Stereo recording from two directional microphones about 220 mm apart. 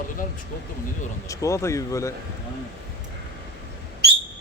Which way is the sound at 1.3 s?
15° left (ahead or behind).